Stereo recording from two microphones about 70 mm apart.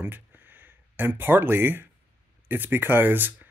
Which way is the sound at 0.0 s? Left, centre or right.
Right.